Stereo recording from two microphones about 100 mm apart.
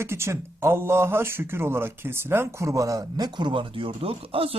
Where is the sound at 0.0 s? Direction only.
25° right (ahead or behind).